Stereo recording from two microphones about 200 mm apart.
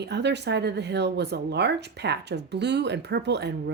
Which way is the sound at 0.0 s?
60° right (ahead or behind).